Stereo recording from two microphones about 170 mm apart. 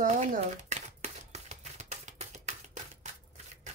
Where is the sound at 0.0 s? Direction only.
50° right (ahead or behind).